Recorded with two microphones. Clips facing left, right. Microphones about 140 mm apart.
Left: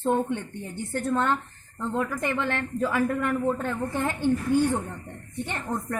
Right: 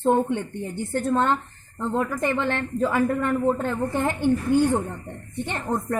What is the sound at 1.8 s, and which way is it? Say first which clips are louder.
A woman's voice: right 3 dB; 50° right (ahead or behind).